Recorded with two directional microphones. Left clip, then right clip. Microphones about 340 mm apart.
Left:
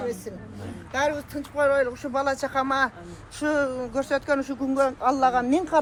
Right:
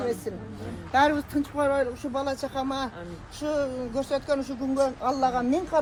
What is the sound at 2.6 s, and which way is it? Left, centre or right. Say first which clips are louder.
Speech: left 7 dB; left.